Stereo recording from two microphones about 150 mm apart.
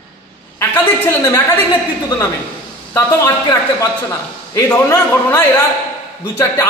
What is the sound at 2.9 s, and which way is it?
A man's voice, 25° left (ahead or behind).